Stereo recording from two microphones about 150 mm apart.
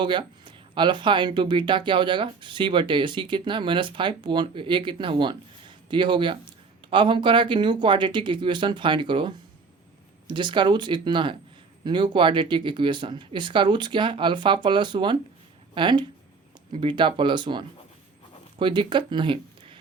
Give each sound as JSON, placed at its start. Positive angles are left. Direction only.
{"t": 0.0, "sound": "speech", "side_deg": -35}